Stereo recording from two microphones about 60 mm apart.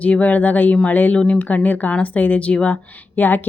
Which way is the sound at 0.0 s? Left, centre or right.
Left.